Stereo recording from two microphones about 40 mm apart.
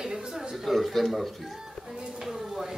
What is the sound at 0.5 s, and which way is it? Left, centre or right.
Speech, centre.